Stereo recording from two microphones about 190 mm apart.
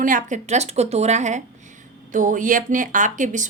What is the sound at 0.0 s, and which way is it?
A woman's voice, 45° right (ahead or behind).